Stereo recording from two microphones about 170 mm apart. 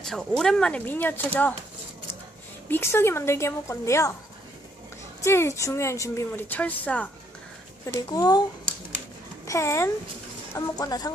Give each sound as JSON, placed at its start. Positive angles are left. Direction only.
{"t": 0.0, "sound": "a woman's voice", "side_deg": 0}
{"t": 2.6, "sound": "a woman's voice", "side_deg": 15}
{"t": 5.2, "sound": "a woman's voice", "side_deg": 15}
{"t": 7.9, "sound": "speech", "side_deg": 20}
{"t": 9.5, "sound": "a woman's voice", "side_deg": 15}